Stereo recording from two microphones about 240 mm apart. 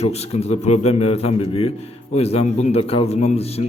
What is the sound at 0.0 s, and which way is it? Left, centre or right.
A man's voice, left.